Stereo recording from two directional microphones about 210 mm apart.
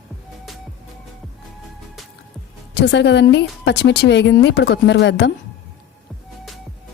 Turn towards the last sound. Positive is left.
turn(degrees=60)  # may be behind; listen again after turning